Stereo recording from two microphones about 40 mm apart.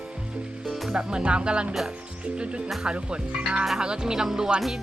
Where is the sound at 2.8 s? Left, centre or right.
Right.